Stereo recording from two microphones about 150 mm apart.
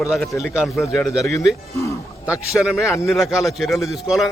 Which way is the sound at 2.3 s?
5° right (ahead or behind).